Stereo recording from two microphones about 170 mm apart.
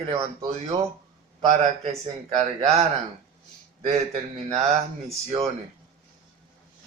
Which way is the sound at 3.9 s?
40° right (ahead or behind).